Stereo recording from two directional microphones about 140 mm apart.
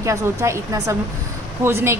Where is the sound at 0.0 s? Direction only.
20° right (ahead or behind).